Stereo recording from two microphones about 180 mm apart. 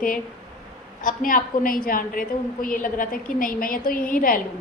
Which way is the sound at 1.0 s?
50° left (ahead or behind).